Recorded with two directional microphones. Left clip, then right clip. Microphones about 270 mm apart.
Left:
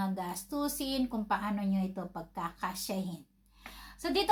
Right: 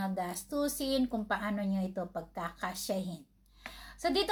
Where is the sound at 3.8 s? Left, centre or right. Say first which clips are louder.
Right 2 dB; centre.